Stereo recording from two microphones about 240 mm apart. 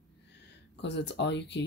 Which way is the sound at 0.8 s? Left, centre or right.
Left.